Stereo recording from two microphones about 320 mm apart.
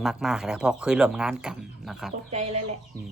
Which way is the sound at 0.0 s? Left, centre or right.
Centre.